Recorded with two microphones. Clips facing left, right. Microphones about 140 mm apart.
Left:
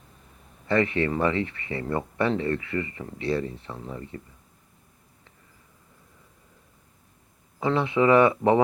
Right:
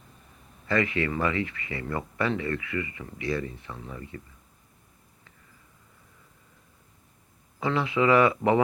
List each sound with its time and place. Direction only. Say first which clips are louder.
0.7 s speech: left 3 dB; 25° left (ahead or behind)
7.6 s speech: left 3 dB; 25° left (ahead or behind)